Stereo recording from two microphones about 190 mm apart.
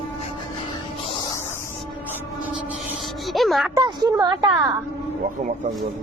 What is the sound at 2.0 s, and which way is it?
Rub, 10° right (ahead or behind).